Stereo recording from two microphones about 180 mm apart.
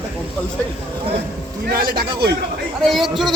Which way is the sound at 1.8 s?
60° right (ahead or behind).